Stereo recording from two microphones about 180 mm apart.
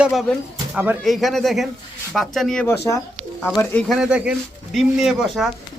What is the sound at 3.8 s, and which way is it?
Speech, centre (ahead or behind).